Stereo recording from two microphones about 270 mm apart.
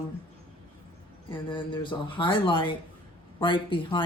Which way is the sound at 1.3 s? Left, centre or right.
Centre.